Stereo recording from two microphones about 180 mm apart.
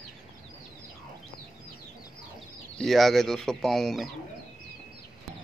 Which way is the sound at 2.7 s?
Centre (ahead or behind).